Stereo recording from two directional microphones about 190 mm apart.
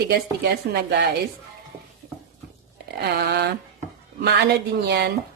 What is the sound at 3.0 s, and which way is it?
Speech, 60° right (ahead or behind).